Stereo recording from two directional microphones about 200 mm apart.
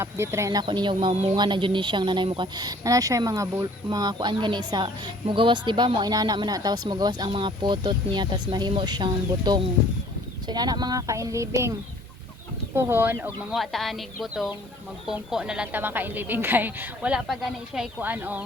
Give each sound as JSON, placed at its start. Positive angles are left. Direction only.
{"t": 0.0, "sound": "speech", "side_deg": -15}
{"t": 12.7, "sound": "speech", "side_deg": -10}